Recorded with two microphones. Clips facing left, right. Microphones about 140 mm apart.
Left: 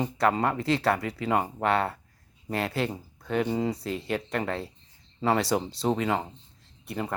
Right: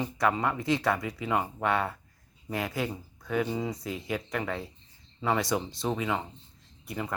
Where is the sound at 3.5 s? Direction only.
35° left (ahead or behind).